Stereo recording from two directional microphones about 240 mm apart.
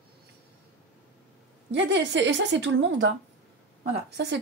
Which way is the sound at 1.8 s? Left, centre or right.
Right.